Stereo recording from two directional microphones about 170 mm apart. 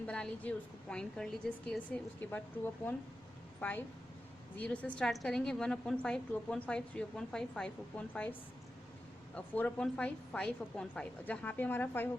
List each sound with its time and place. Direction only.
0.0 s a woman's voice: 5° left (ahead or behind)